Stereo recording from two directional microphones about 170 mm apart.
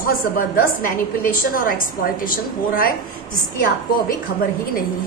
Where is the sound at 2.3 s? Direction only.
55° left (ahead or behind).